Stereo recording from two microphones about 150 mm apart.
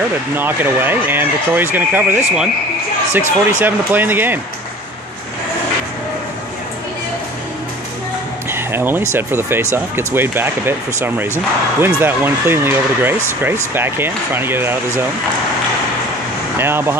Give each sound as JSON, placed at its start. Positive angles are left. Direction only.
{"t": 0.4, "sound": "speech", "side_deg": -15}
{"t": 8.5, "sound": "speech", "side_deg": -15}
{"t": 16.5, "sound": "speech", "side_deg": -15}